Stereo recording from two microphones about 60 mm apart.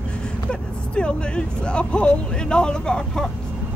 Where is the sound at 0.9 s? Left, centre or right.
Centre.